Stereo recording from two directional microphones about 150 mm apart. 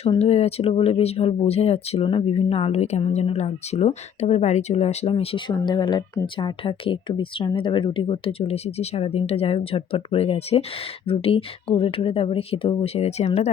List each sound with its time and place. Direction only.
0.2 s speech: 45° left (ahead or behind)